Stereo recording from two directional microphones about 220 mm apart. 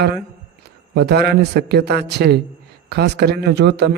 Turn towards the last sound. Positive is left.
turn(degrees=-50)  # may be behind; listen again after turning